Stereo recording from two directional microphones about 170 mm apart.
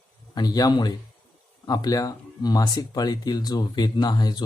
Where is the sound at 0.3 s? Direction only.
20° left (ahead or behind).